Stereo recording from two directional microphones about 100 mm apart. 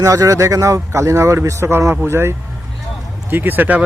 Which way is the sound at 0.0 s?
35° right (ahead or behind).